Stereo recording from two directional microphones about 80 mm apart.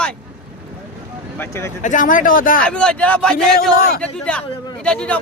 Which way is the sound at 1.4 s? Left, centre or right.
Left.